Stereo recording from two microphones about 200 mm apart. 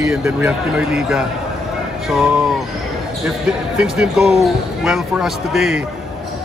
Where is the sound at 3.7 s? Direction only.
5° right (ahead or behind).